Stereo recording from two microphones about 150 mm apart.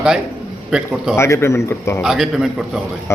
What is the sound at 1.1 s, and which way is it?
Speech, 15° left (ahead or behind).